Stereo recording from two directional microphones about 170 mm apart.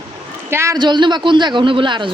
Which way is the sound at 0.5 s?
20° right (ahead or behind).